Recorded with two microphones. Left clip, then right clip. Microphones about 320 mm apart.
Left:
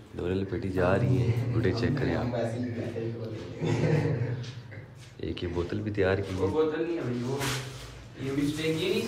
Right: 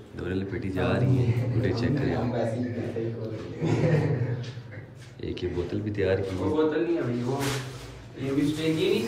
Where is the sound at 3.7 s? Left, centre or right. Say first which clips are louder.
Right 3 dB; centre.